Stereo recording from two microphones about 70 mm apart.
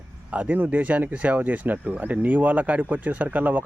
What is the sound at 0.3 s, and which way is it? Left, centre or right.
Speech, right.